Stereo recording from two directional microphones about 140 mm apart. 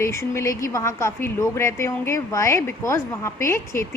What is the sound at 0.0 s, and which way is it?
Speech, 20° left (ahead or behind).